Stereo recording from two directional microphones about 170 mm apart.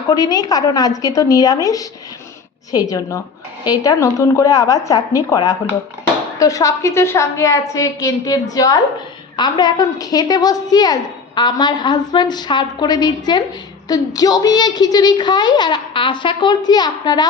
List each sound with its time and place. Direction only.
0.1 s a woman's voice: 20° left (ahead or behind)